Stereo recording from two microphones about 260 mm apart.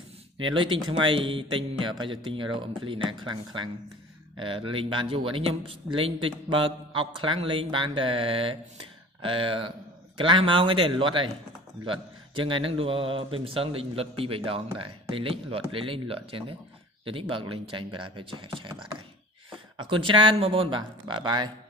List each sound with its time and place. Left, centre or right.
0.5 s speech: centre
12.4 s speech: centre
19.9 s speech: centre